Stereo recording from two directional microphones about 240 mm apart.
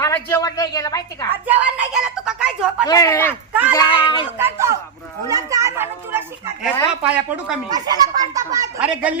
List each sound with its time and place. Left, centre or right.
0.0 s a woman's voice: centre
1.5 s speech: centre
2.8 s a woman's voice: centre
4.4 s speech: centre
7.7 s speech: centre